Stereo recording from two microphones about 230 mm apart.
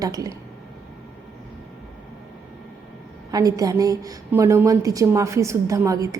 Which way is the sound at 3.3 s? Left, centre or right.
Centre.